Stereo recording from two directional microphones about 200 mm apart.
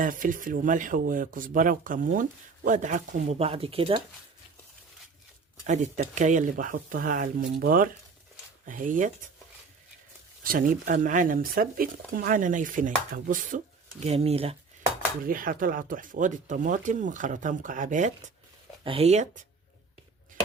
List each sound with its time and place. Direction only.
0.0 s speech: 40° right (ahead or behind)
5.6 s speech: 35° right (ahead or behind)
10.4 s speech: 45° right (ahead or behind)
14.0 s speech: 30° right (ahead or behind)
15.2 s speech: 45° right (ahead or behind)